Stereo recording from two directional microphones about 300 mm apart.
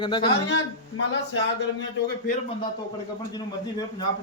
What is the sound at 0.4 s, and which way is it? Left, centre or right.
A man's voice, left.